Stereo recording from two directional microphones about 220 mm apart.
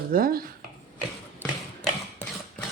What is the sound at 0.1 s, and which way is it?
Speech, 40° right (ahead or behind).